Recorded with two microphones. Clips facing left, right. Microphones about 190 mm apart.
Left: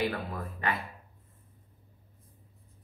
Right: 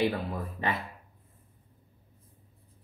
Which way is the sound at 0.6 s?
25° right (ahead or behind).